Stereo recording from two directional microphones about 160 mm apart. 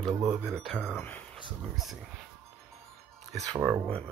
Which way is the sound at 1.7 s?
Centre (ahead or behind).